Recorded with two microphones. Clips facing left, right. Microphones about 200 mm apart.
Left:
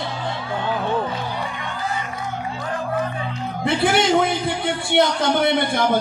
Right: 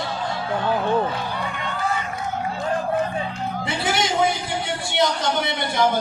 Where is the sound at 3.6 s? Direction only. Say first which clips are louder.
Left 7 dB; 55° left (ahead or behind).